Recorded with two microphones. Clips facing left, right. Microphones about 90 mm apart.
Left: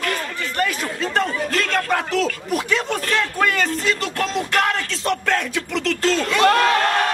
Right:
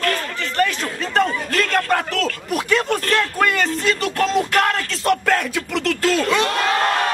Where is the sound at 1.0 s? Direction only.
Centre (ahead or behind).